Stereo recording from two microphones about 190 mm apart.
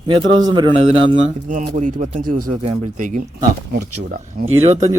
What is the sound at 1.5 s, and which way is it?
Speech, 45° right (ahead or behind).